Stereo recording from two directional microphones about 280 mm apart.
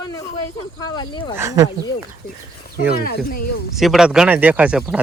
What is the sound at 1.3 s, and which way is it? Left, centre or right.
Speech, centre.